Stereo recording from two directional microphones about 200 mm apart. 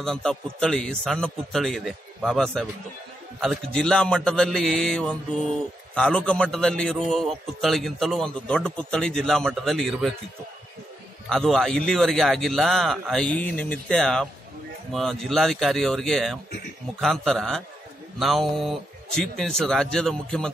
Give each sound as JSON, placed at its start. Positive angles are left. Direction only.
{"t": 0.0, "sound": "a man's voice", "side_deg": 0}
{"t": 11.2, "sound": "a man's voice", "side_deg": 0}